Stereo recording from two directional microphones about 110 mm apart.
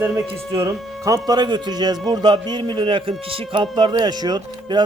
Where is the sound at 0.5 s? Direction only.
30° right (ahead or behind).